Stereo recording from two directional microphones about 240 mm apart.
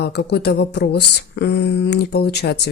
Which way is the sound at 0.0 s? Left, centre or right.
Left.